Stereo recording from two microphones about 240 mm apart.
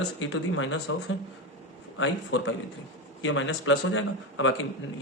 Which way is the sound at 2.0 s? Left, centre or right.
Left.